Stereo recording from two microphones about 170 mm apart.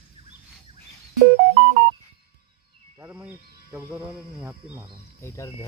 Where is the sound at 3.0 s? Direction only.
10° right (ahead or behind).